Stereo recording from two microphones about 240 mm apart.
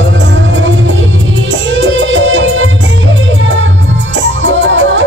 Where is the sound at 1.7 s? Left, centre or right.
Right.